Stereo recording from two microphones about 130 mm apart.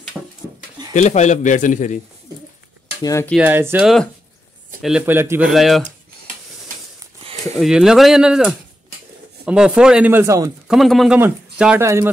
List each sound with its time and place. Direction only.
0.2 s a sound: centre (ahead or behind)
0.9 s a man's voice: 65° left (ahead or behind)
3.0 s speech: 25° left (ahead or behind)
3.3 s speech: 15° right (ahead or behind)
3.8 s speech: centre (ahead or behind)
5.0 s speech: 15° right (ahead or behind)
5.4 s speech: centre (ahead or behind)
7.5 s speech: 5° right (ahead or behind)
10.2 s speech: 25° right (ahead or behind)
10.7 s speech: centre (ahead or behind)
11.8 s speech: 20° right (ahead or behind)